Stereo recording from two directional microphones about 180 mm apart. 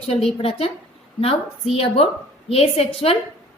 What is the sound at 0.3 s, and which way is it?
A woman's voice, 30° left (ahead or behind).